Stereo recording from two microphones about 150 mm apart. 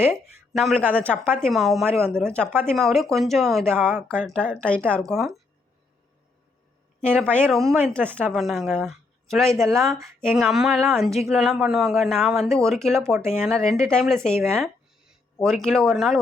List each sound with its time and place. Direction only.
0.1 s speech: centre (ahead or behind)
0.8 s speech: 10° right (ahead or behind)
1.4 s a woman's voice: centre (ahead or behind)
7.0 s a woman's voice: 5° left (ahead or behind)
9.5 s speech: 20° right (ahead or behind)
9.7 s speech: centre (ahead or behind)
13.0 s speech: 20° right (ahead or behind)
13.4 s speech: centre (ahead or behind)